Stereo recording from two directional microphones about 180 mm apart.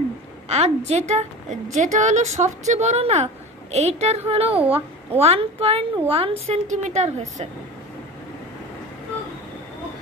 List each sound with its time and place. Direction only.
0.5 s a woman's voice: 35° right (ahead or behind)